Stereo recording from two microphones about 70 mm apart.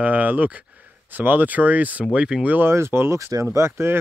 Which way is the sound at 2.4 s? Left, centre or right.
Right.